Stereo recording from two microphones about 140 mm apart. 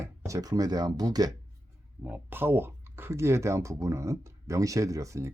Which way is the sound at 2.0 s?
15° right (ahead or behind).